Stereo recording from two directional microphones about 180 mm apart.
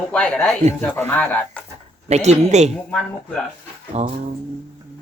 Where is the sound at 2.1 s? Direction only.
40° right (ahead or behind).